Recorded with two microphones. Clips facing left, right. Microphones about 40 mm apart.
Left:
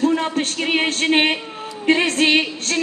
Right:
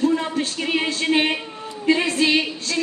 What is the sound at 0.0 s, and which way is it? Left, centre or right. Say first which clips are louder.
A woman's voice: left 2 dB; left.